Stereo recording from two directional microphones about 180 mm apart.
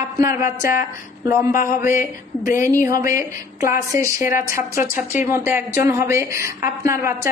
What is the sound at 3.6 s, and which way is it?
Speech, 15° right (ahead or behind).